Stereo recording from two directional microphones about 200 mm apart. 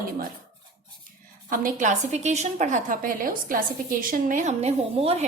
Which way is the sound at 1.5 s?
40° right (ahead or behind).